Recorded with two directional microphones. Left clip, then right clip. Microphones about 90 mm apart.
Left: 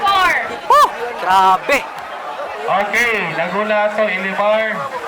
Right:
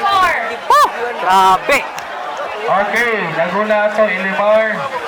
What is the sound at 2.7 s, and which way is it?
A man's voice, 35° left (ahead or behind).